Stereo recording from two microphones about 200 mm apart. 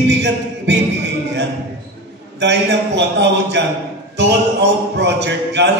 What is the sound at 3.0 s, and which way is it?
Speech, 60° right (ahead or behind).